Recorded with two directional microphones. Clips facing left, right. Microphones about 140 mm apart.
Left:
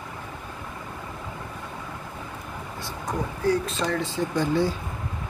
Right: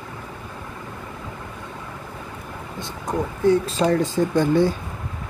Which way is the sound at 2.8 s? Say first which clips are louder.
Right 4 dB; 20° right (ahead or behind).